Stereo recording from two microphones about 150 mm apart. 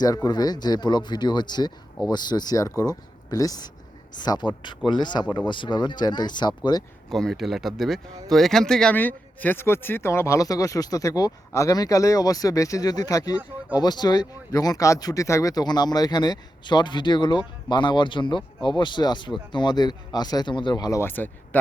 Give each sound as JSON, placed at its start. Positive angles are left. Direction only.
{"t": 0.0, "sound": "speech", "side_deg": 25}
{"t": 7.1, "sound": "speech", "side_deg": 0}